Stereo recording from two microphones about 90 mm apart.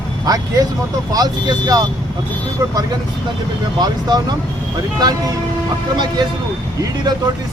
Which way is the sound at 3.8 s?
50° right (ahead or behind).